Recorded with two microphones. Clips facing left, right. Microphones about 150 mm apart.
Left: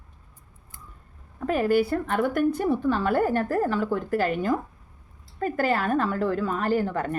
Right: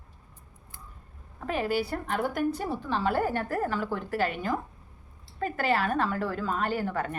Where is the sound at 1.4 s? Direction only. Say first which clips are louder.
Left 7 dB; 45° left (ahead or behind).